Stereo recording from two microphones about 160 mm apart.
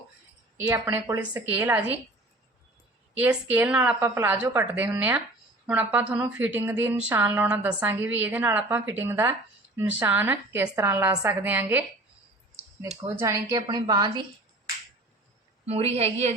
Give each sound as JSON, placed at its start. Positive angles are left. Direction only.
{"t": 0.6, "sound": "a woman's voice", "side_deg": -15}
{"t": 3.2, "sound": "a woman's voice", "side_deg": -10}
{"t": 13.0, "sound": "a woman's voice", "side_deg": -15}
{"t": 15.6, "sound": "a woman's voice", "side_deg": -40}